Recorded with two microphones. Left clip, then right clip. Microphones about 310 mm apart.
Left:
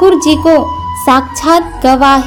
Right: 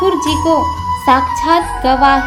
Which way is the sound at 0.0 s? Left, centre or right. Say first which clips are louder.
Left 6 dB; left.